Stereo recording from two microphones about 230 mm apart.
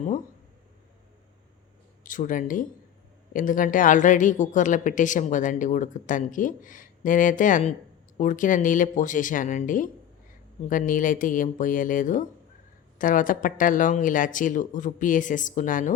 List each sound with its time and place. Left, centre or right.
2.0 s speech: left